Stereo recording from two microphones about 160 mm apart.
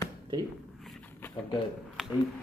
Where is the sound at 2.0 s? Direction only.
Centre (ahead or behind).